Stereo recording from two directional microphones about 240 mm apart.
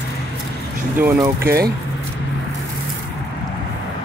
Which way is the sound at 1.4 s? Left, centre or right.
Right.